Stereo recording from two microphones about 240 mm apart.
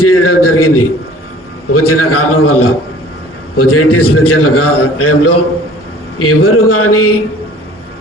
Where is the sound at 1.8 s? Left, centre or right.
Left.